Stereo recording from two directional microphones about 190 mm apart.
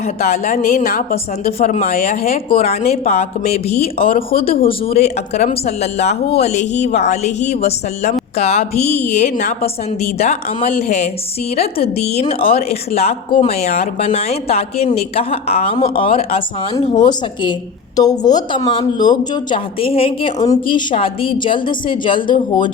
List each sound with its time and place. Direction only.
0.2 s speech: 35° left (ahead or behind)
1.5 s speech: 35° left (ahead or behind)
4.0 s speech: 50° left (ahead or behind)
4.6 s speech: 30° left (ahead or behind)